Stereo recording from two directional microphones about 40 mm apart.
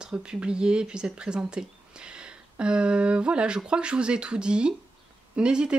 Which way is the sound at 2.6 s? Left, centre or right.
Right.